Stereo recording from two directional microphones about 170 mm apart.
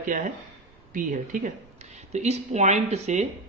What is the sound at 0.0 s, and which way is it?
Speech, 50° right (ahead or behind).